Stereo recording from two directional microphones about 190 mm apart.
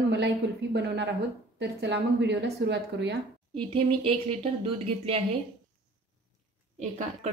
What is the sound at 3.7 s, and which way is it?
Speech, 30° right (ahead or behind).